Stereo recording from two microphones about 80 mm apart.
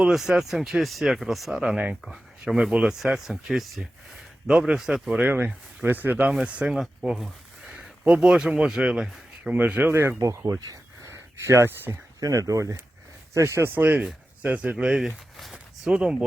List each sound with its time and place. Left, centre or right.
0.0 s speech: centre
5.3 s speech: right
10.2 s speech: right
11.0 s a sound: right
12.2 s speech: right; by 15.0 s centre
15.0 s a sound: centre